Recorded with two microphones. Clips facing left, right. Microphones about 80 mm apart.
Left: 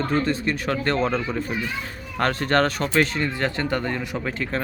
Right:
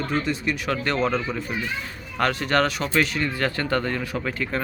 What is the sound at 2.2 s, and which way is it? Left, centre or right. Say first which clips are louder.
Speech: left 1 dB; left.